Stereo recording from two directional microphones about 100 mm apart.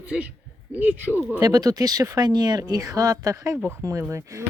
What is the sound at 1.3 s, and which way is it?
Speech, 40° right (ahead or behind).